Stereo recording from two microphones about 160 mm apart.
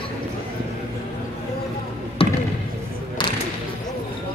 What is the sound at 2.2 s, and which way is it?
Basketball bounce, 35° left (ahead or behind).